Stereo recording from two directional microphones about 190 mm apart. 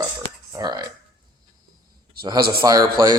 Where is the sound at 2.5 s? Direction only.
25° right (ahead or behind).